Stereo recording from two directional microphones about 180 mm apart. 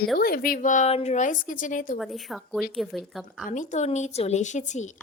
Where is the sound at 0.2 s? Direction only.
55° left (ahead or behind).